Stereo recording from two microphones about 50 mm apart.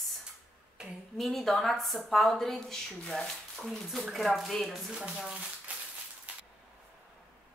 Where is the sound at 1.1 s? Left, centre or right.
Centre.